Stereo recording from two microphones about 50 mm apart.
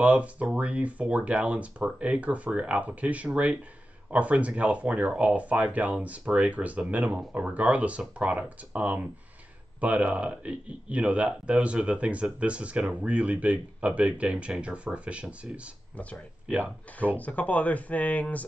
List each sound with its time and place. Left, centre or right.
0.0 s speech: right
16.0 s speech: left